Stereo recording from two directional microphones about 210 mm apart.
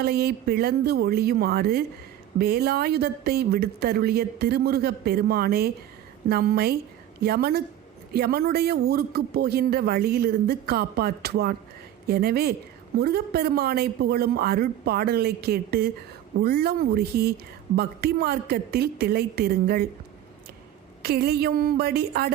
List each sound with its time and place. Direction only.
0.0 s speech: 50° right (ahead or behind)
21.0 s speech: 50° right (ahead or behind)